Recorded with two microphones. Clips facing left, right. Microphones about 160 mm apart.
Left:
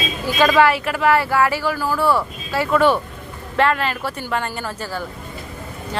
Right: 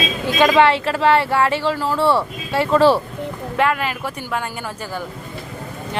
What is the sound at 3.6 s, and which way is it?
Speech, 10° right (ahead or behind).